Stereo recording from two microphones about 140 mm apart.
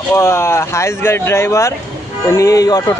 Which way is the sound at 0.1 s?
20° left (ahead or behind).